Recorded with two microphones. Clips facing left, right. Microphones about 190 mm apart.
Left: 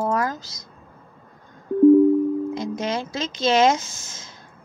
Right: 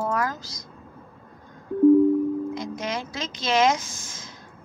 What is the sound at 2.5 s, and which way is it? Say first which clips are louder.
A woman's voice: left 4 dB; 25° left (ahead or behind).